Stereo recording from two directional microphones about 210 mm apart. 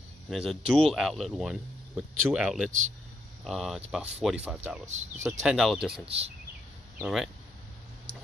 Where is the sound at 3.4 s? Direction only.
Centre (ahead or behind).